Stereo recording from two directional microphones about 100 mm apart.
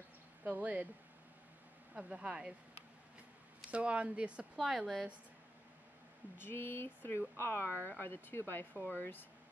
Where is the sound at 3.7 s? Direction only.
10° right (ahead or behind).